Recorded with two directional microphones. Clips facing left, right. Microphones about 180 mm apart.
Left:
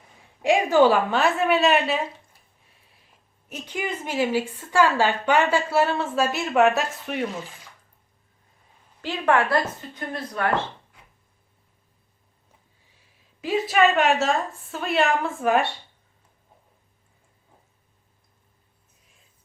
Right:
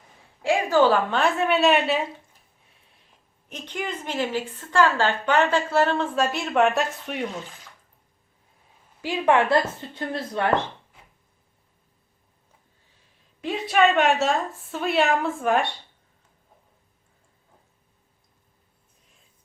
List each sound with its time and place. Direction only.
0.4 s a woman's voice: 15° left (ahead or behind); by 2.0 s centre (ahead or behind)
3.5 s a woman's voice: 10° left (ahead or behind)
9.0 s speech: 15° right (ahead or behind)
13.4 s a woman's voice: centre (ahead or behind)